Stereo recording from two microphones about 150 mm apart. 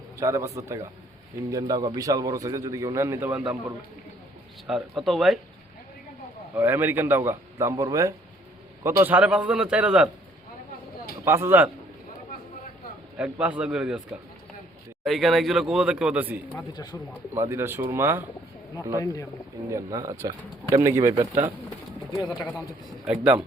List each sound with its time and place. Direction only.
0.2 s a man's voice: 20° right (ahead or behind)
4.6 s speech: centre (ahead or behind)
6.6 s speech: 15° right (ahead or behind)
11.3 s speech: 15° right (ahead or behind)
13.1 s speech: 10° right (ahead or behind)
16.7 s speech: 30° left (ahead or behind)
17.3 s speech: 20° right (ahead or behind)
18.9 s speech: 20° left (ahead or behind)
19.7 s a man's voice: 20° right (ahead or behind)
22.3 s speech: centre (ahead or behind)
23.0 s speech: 10° right (ahead or behind)